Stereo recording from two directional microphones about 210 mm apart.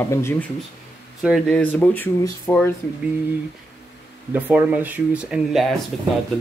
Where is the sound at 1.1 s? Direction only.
Centre (ahead or behind).